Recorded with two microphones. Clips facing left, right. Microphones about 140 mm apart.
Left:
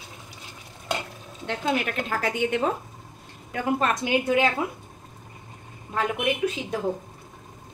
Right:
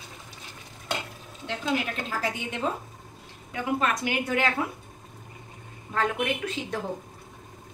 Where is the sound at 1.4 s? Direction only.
60° left (ahead or behind).